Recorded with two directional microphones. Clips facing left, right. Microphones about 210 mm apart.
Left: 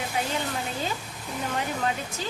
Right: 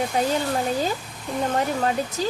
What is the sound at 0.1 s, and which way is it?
Speech, 35° right (ahead or behind).